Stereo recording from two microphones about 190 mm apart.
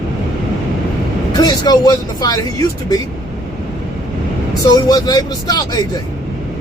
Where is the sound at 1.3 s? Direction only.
20° left (ahead or behind).